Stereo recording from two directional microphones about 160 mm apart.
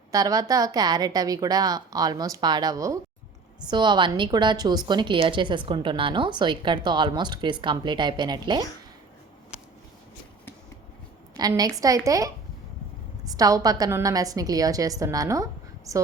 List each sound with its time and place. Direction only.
0.1 s a woman's voice: 20° right (ahead or behind)
11.3 s a woman's voice: 25° right (ahead or behind)